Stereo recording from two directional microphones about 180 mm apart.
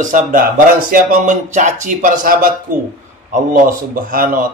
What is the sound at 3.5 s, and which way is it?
Speech, 50° right (ahead or behind).